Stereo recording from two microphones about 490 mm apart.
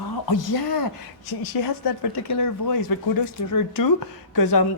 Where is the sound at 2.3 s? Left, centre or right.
Left.